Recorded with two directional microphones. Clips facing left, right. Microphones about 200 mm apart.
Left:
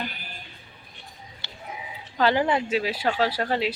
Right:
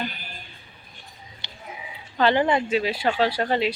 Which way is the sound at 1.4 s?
15° right (ahead or behind).